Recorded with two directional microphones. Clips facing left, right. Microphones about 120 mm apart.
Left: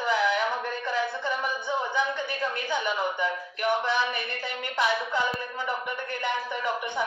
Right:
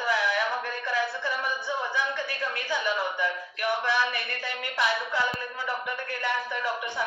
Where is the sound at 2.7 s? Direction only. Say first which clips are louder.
Right 1 dB; 20° left (ahead or behind).